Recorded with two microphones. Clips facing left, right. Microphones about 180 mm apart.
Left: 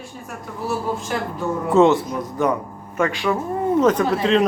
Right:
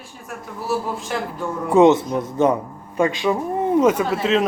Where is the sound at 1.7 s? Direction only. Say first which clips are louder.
Right 2 dB; 20° right (ahead or behind); by 4.4 s 5° right (ahead or behind).